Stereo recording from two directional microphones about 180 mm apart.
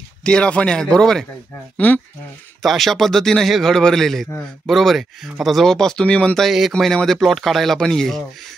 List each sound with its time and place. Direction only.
0.2 s speech: 5° left (ahead or behind)
2.6 s speech: centre (ahead or behind)